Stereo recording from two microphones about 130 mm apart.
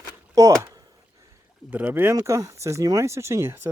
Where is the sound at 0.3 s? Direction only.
25° right (ahead or behind).